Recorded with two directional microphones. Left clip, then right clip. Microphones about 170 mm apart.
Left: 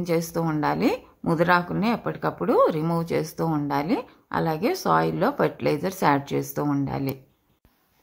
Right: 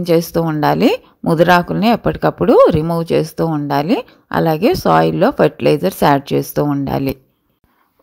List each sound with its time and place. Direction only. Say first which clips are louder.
0.0 s a woman's voice: right 11 dB; 35° right (ahead or behind)